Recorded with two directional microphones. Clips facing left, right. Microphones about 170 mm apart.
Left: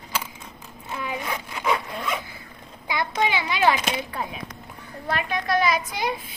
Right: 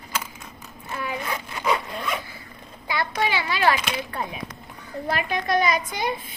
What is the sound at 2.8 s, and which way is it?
A child's voice, 20° left (ahead or behind).